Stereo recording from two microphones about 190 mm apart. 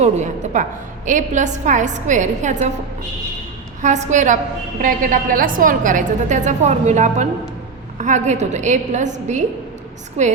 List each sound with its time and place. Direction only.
0.0 s a woman's voice: 40° right (ahead or behind)
3.8 s a woman's voice: 40° right (ahead or behind)